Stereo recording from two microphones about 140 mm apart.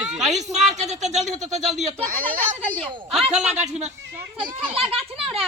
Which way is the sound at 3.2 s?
50° right (ahead or behind).